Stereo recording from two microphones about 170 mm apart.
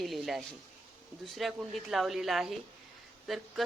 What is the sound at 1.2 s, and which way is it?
Speech, centre (ahead or behind).